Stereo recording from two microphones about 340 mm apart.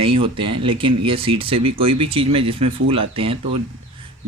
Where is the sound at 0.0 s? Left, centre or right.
Centre.